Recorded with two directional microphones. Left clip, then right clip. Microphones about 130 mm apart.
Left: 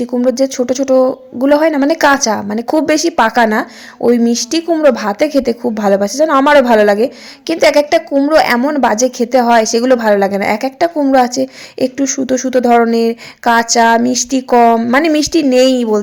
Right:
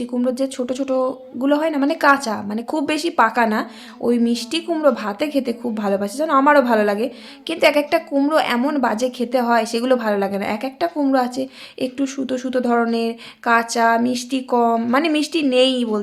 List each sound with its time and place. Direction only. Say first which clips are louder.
0.1 s a woman's voice: left 8 dB; 40° left (ahead or behind)